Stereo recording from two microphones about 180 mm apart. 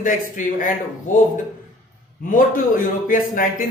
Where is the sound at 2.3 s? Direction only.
50° left (ahead or behind).